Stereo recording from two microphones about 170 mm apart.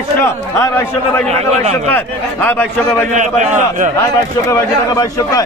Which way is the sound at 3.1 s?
45° right (ahead or behind).